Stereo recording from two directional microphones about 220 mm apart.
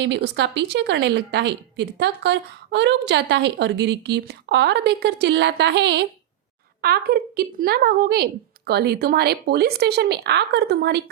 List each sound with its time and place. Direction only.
0.0 s a woman's voice: 50° right (ahead or behind)